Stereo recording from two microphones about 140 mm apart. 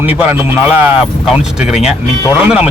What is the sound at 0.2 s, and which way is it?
A man's voice, 15° right (ahead or behind).